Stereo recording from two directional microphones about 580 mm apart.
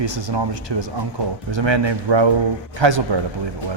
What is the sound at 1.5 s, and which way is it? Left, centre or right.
A man's voice, right.